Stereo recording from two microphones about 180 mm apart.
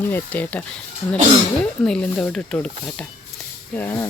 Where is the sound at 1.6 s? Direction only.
10° left (ahead or behind).